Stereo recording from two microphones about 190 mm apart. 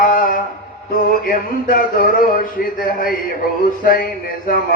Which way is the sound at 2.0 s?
45° left (ahead or behind).